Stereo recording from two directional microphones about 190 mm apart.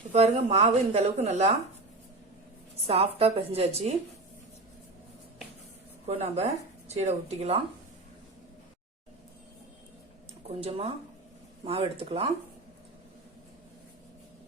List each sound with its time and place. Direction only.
0.1 s speech: 35° right (ahead or behind)
2.8 s speech: 30° right (ahead or behind)
6.1 s speech: 35° right (ahead or behind)
10.6 s speech: 30° right (ahead or behind)